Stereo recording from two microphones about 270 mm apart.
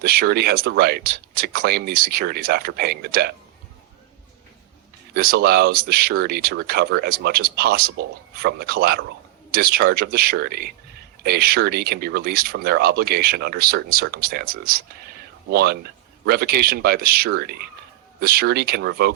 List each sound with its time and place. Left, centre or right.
0.0 s speech: right
5.1 s speech: right